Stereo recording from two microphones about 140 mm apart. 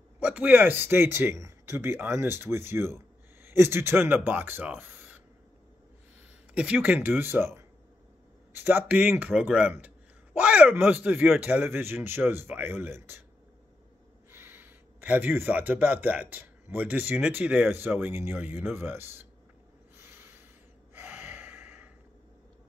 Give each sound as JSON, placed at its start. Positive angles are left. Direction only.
{"t": 0.2, "sound": "a man's voice", "side_deg": -10}
{"t": 6.5, "sound": "a man's voice", "side_deg": -10}
{"t": 14.3, "sound": "speech", "side_deg": -15}
{"t": 20.0, "sound": "a sound", "side_deg": -15}
{"t": 20.9, "sound": "gasp", "side_deg": -15}